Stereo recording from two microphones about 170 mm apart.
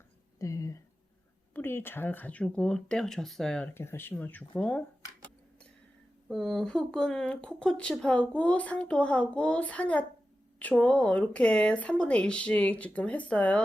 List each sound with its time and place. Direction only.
0.3 s a sound: 20° left (ahead or behind)
1.5 s speech: 15° left (ahead or behind)
3.8 s speech: 15° left (ahead or behind)
6.2 s speech: centre (ahead or behind)